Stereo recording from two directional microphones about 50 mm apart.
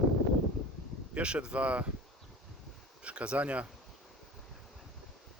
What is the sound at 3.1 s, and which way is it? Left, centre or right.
Speech, right.